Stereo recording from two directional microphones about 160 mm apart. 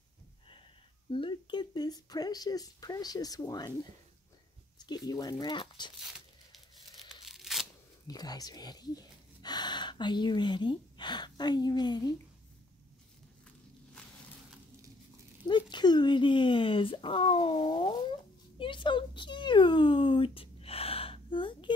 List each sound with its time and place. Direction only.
1.1 s speech: 30° left (ahead or behind)
4.7 s speech: 25° left (ahead or behind)
5.9 s tearing: centre (ahead or behind)
8.1 s speech: 25° left (ahead or behind)
15.4 s speech: 30° left (ahead or behind)